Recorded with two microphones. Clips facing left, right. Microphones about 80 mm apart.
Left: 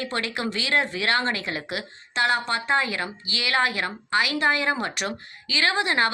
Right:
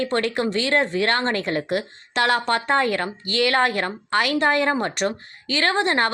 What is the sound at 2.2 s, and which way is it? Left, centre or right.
Speech, right.